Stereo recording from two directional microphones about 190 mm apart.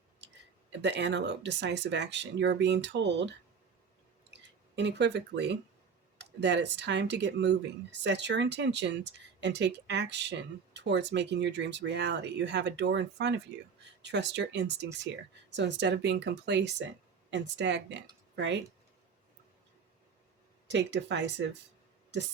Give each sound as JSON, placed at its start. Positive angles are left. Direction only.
{"t": 0.7, "sound": "speech", "side_deg": -65}
{"t": 20.7, "sound": "speech", "side_deg": -70}